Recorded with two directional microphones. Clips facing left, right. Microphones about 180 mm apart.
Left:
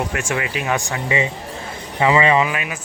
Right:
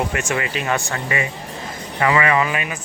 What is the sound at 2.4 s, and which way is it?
Speech, 5° left (ahead or behind).